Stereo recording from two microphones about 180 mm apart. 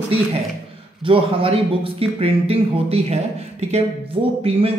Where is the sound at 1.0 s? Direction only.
30° right (ahead or behind).